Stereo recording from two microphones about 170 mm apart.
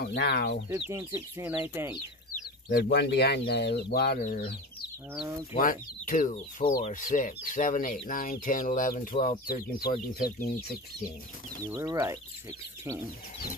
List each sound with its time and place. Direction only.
0.0 s speech: 75° left (ahead or behind)
0.7 s speech: 15° right (ahead or behind)
2.7 s speech: 75° left (ahead or behind)
4.2 s speech: 60° left (ahead or behind)
5.6 s speech: 55° left (ahead or behind)
11.7 s speech: 15° right (ahead or behind)